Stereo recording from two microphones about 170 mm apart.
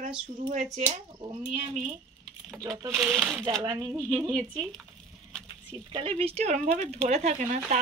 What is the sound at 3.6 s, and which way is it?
Speech, 25° right (ahead or behind).